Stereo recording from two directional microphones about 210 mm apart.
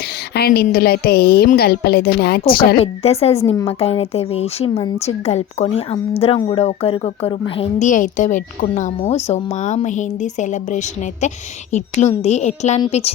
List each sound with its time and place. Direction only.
0.3 s a woman's voice: 50° left (ahead or behind)
2.7 s speech: 30° left (ahead or behind)
7.8 s a woman's voice: 35° left (ahead or behind)